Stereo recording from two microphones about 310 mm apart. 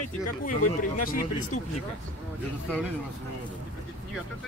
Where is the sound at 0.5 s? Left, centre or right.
Left.